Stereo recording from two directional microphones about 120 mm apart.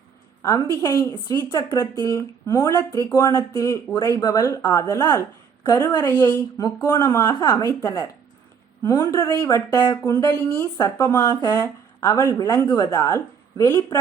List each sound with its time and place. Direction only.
0.4 s a woman's voice: 25° left (ahead or behind)